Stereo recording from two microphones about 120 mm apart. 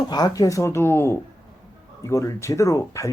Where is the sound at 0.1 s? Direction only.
30° left (ahead or behind).